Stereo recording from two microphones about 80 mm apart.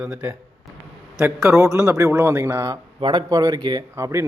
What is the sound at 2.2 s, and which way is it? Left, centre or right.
Speech, right.